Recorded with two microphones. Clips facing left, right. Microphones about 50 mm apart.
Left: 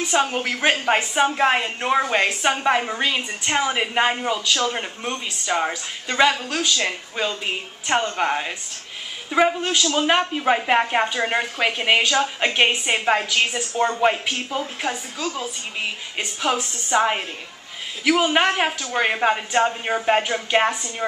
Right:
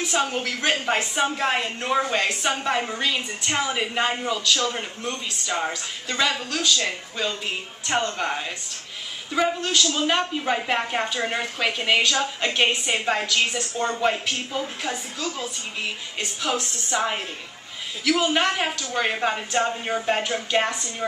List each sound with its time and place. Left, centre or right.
0.2 s a woman's voice: centre